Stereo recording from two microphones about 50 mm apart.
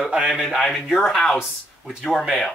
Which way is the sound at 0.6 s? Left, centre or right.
Centre.